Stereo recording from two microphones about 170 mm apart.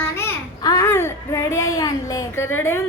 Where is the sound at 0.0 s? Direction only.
15° left (ahead or behind).